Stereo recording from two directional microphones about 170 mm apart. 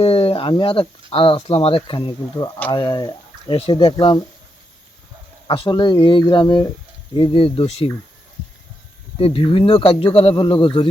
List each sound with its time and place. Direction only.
0.0 s a sound: 35° left (ahead or behind)
0.5 s speech: 30° left (ahead or behind)
5.5 s speech: 30° left (ahead or behind)
9.1 s speech: 35° left (ahead or behind)